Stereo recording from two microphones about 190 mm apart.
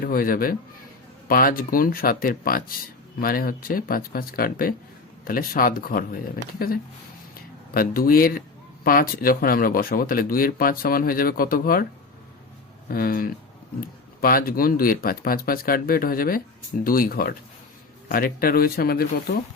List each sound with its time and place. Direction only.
0.0 s speech: 50° left (ahead or behind)
12.9 s speech: 50° left (ahead or behind)